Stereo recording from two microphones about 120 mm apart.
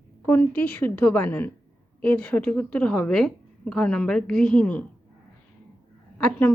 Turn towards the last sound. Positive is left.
turn(degrees=15)  # may be behind; listen again after turning